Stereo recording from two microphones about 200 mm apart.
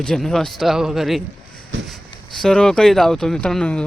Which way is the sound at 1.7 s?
65° right (ahead or behind).